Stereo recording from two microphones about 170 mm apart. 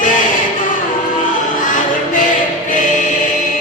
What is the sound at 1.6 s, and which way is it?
Music, 50° left (ahead or behind).